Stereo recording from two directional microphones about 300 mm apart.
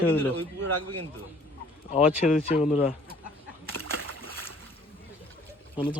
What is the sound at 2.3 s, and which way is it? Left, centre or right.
Speech, left.